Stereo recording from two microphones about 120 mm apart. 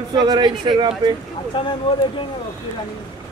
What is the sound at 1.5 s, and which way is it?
Speech, 40° left (ahead or behind).